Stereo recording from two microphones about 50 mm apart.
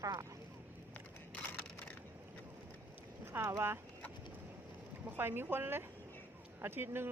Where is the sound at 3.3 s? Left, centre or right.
Right.